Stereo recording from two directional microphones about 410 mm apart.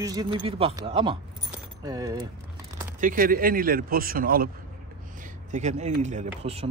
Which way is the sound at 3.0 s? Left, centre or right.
Centre.